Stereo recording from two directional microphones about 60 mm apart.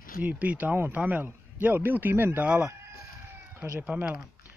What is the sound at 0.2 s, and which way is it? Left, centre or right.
A man's voice, right.